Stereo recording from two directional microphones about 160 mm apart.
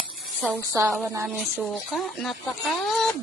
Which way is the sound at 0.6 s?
15° right (ahead or behind).